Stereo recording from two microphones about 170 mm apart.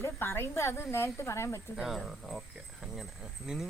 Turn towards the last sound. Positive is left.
turn(degrees=0)  # may be behind; listen again after turning